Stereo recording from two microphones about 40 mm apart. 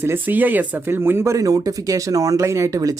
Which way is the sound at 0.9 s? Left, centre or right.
Right.